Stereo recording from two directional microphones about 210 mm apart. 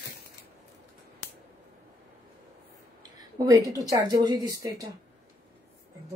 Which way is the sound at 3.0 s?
15° right (ahead or behind).